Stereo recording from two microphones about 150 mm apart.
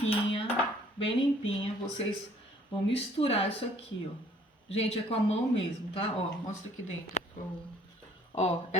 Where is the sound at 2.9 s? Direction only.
40° left (ahead or behind).